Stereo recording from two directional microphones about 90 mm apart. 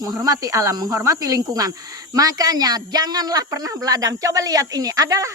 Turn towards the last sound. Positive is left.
turn(degrees=-40)  # may be behind; listen again after turning